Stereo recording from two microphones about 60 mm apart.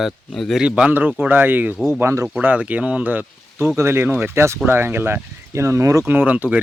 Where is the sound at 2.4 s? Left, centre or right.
Right.